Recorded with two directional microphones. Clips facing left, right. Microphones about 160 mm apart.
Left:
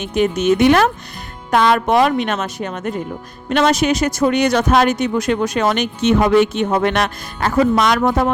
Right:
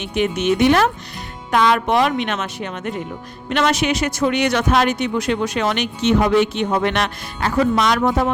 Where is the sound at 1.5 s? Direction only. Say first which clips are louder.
Left 2 dB; 40° left (ahead or behind).